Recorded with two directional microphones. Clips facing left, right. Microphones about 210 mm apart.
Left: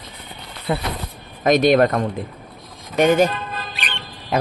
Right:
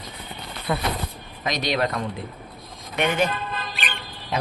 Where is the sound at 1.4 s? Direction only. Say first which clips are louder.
Left 11 dB; 50° left (ahead or behind).